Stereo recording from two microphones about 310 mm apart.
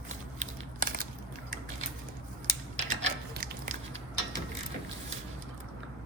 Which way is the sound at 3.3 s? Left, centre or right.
Right.